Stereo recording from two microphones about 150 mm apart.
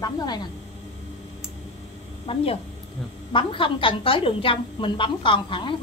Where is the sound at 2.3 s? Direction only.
35° left (ahead or behind).